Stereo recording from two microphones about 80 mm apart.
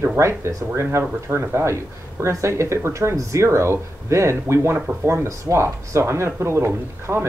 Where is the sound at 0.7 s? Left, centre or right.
Right.